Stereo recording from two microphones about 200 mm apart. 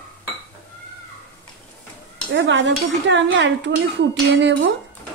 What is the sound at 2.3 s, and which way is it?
A woman's voice, 65° right (ahead or behind).